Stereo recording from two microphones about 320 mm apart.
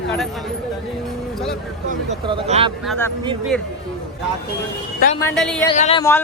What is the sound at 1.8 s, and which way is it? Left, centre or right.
Speech, centre.